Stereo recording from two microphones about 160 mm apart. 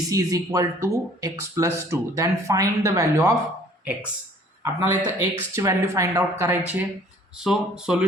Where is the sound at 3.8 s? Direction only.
10° right (ahead or behind).